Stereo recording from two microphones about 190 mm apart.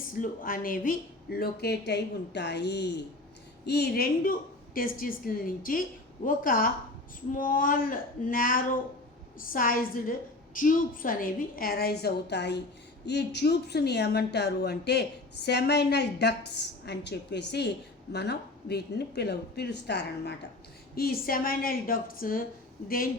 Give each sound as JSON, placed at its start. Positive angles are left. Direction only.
{"t": 0.1, "sound": "a woman's voice", "side_deg": 45}